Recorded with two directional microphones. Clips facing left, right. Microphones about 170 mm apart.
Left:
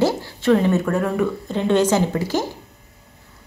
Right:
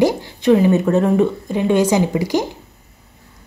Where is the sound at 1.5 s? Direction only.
10° right (ahead or behind).